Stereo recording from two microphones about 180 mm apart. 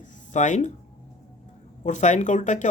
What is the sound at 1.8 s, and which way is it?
Speech, 40° left (ahead or behind).